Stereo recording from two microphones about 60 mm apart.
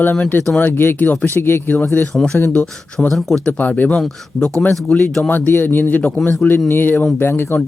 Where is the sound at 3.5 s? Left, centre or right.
Left.